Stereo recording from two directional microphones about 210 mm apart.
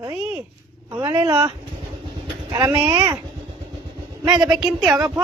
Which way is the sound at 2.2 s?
10° right (ahead or behind).